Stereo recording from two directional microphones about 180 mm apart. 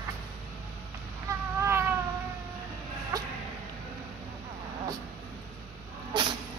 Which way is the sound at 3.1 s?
20° right (ahead or behind).